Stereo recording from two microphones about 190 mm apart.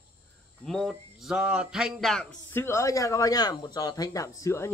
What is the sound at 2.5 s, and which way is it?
Speech, 15° left (ahead or behind).